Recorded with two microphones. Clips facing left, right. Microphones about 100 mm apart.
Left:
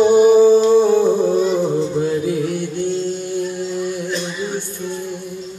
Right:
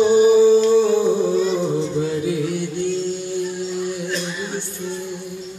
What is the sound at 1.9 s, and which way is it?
Music, 50° left (ahead or behind).